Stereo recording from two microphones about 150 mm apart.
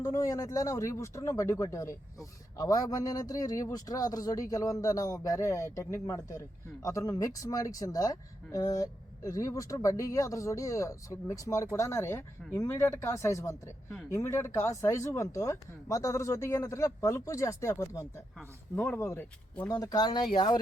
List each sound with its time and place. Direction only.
0.0 s speech: 20° left (ahead or behind)
19.7 s speech: 25° left (ahead or behind)